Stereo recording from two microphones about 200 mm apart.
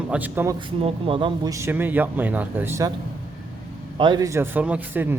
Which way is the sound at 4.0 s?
20° right (ahead or behind).